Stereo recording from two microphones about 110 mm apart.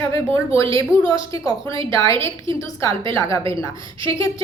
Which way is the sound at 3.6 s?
30° left (ahead or behind).